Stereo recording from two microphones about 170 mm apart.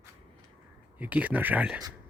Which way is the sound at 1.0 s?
10° right (ahead or behind).